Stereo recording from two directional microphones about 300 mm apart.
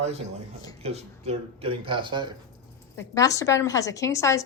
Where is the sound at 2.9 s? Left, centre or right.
Centre.